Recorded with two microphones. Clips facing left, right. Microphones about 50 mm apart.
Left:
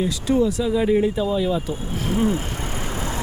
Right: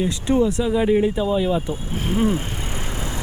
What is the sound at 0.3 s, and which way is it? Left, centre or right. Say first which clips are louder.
Speech: right 1 dB; centre.